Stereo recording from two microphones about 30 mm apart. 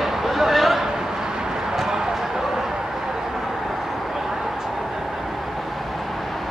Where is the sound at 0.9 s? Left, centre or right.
Right.